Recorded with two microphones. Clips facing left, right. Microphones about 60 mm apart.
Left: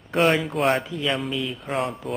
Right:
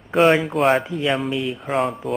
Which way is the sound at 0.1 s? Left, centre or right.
Centre.